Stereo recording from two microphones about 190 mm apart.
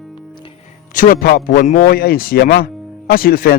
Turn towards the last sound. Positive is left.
turn(degrees=50)  # may be behind; listen again after turning